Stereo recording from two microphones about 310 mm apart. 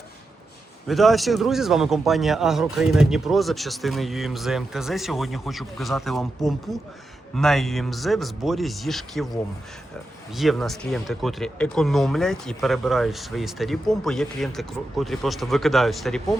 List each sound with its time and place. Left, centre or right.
0.9 s speech: centre